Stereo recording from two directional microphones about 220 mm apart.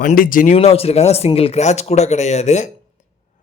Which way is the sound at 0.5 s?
25° left (ahead or behind).